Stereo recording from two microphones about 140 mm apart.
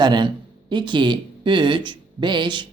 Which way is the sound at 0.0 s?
30° right (ahead or behind).